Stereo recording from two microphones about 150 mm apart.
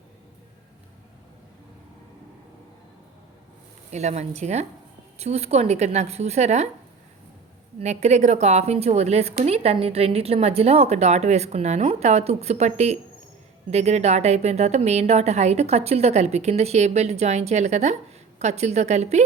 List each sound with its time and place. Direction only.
3.9 s a woman's voice: 45° right (ahead or behind)
7.8 s a woman's voice: 50° right (ahead or behind)